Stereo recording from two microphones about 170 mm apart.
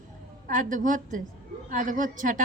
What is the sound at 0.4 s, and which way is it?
A woman's voice, 50° right (ahead or behind).